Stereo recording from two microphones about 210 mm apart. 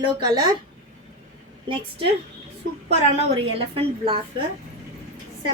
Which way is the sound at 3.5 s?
25° right (ahead or behind).